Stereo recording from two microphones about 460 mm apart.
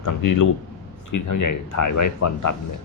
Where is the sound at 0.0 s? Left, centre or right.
Left.